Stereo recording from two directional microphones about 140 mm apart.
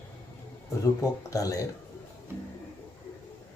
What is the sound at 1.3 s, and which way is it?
Speech, 25° left (ahead or behind).